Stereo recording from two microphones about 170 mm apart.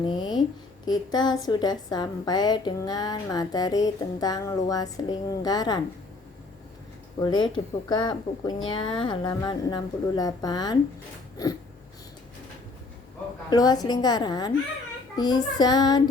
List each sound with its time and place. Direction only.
0.0 s a woman's voice: 25° left (ahead or behind)
7.2 s a woman's voice: 25° left (ahead or behind)
13.5 s a woman's voice: 20° left (ahead or behind)